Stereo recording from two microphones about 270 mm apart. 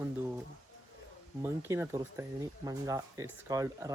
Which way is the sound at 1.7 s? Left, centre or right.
Centre.